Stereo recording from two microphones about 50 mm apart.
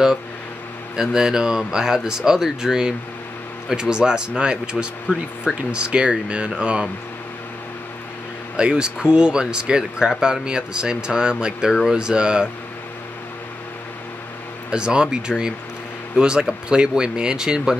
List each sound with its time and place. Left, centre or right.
0.9 s speech: centre
8.5 s speech: centre
11.7 s speech: centre
12.0 s speech: centre
14.7 s speech: centre